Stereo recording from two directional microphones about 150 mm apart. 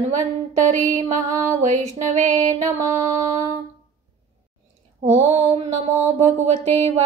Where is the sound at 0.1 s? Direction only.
55° right (ahead or behind).